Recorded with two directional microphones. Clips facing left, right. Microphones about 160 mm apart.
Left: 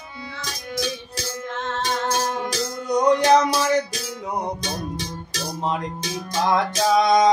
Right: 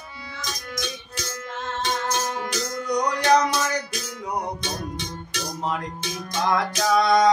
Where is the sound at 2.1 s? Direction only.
30° left (ahead or behind).